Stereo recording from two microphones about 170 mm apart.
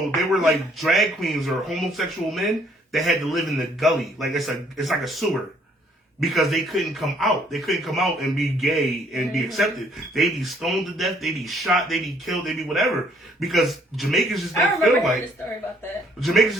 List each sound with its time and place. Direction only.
0.3 s a man's voice: centre (ahead or behind)
16.2 s a man's voice: centre (ahead or behind)